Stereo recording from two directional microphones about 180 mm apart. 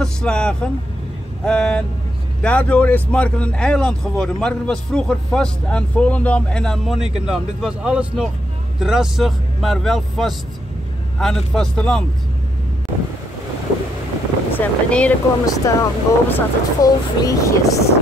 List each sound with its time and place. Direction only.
0.0 s speech: 5° left (ahead or behind)
14.5 s speech: 10° left (ahead or behind)
15.4 s speech: 20° left (ahead or behind)